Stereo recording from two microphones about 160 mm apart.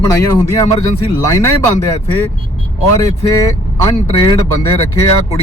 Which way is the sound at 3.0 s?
20° left (ahead or behind).